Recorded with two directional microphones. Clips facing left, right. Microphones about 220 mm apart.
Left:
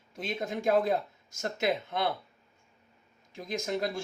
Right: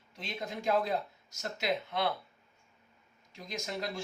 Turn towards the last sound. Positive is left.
turn(degrees=50)  # may be behind; listen again after turning